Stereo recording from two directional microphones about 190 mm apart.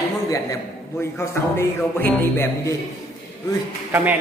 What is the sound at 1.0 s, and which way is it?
Music, 15° left (ahead or behind).